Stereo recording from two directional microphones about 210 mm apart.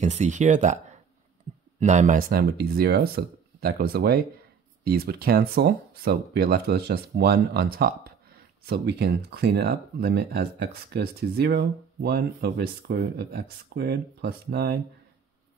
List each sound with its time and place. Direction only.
0.0 s speech: 35° right (ahead or behind); by 14.8 s 50° right (ahead or behind)